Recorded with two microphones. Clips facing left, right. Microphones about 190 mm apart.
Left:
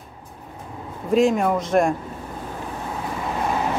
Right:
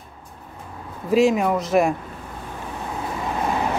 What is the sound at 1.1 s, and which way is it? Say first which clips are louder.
Speech: even; 5° right (ahead or behind).